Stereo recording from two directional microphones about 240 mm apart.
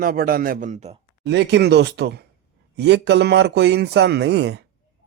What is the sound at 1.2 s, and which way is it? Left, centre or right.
Speech, right.